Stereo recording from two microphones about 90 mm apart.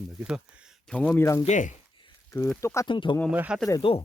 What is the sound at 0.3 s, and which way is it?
Speech, 10° right (ahead or behind).